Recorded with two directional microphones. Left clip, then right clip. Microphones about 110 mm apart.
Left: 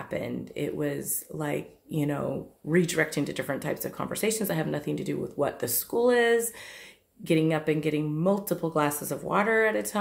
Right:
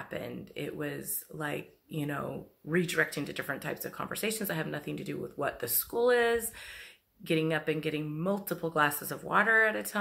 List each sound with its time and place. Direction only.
0.1 s speech: 25° left (ahead or behind)